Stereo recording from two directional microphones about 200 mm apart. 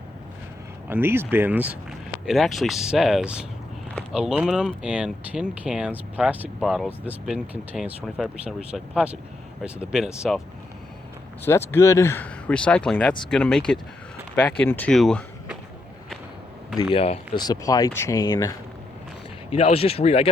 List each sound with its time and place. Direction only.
0.9 s speech: 10° right (ahead or behind)
11.4 s speech: 10° left (ahead or behind)
16.9 s speech: 30° left (ahead or behind)
17.4 s speech: 20° left (ahead or behind)
19.5 s speech: 30° left (ahead or behind)